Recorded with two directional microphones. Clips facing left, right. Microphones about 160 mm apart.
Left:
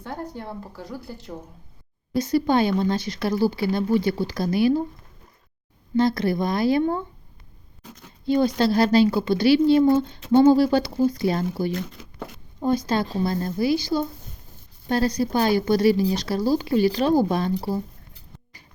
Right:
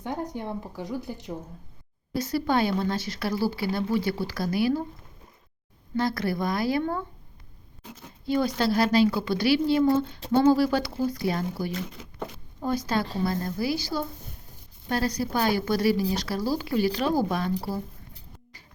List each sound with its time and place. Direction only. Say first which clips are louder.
0.0 s speech: right 2 dB; 15° right (ahead or behind)
2.1 s a woman's voice: left 5 dB; 20° left (ahead or behind)
6.0 s a woman's voice: left 6 dB; 20° left (ahead or behind)
8.3 s a woman's voice: left 4 dB; 25° left (ahead or behind)